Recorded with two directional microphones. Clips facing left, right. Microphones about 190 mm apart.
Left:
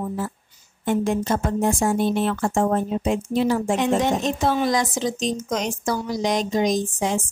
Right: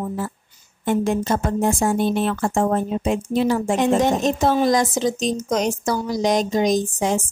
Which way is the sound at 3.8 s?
45° right (ahead or behind).